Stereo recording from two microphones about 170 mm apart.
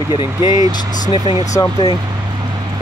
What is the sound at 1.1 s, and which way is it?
Speech, 35° left (ahead or behind).